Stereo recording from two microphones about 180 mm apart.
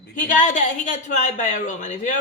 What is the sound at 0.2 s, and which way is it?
A woman's voice, 45° left (ahead or behind).